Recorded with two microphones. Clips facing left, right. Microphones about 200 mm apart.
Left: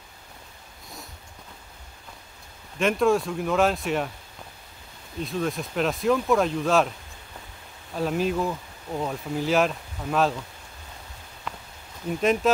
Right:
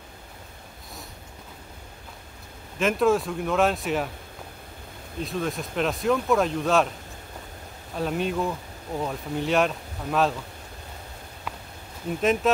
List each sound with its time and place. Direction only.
2.8 s speech: centre (ahead or behind)
5.2 s speech: centre (ahead or behind)
7.9 s speech: centre (ahead or behind)